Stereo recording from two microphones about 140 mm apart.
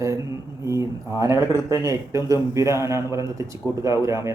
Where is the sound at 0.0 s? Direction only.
20° right (ahead or behind).